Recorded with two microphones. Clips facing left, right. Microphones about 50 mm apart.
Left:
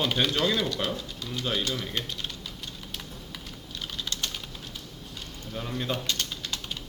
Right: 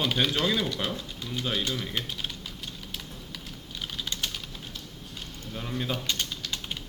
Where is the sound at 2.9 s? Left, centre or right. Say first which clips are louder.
Even; centre.